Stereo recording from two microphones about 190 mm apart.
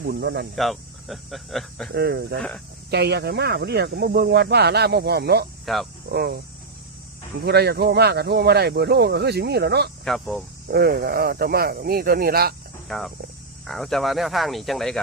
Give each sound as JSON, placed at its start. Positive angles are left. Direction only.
{"t": 0.0, "sound": "speech", "side_deg": -60}
{"t": 0.5, "sound": "speech", "side_deg": 0}
{"t": 1.9, "sound": "speech", "side_deg": -55}
{"t": 5.6, "sound": "speech", "side_deg": 0}
{"t": 6.1, "sound": "speech", "side_deg": -55}
{"t": 7.4, "sound": "speech", "side_deg": -60}
{"t": 10.0, "sound": "speech", "side_deg": 0}
{"t": 10.7, "sound": "speech", "side_deg": -55}
{"t": 12.9, "sound": "speech", "side_deg": 0}